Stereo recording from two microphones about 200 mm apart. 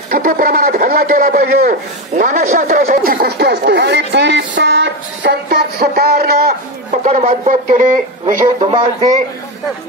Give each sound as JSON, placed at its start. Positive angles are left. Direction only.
{"t": 0.1, "sound": "speech", "side_deg": -45}
{"t": 7.1, "sound": "speech", "side_deg": -35}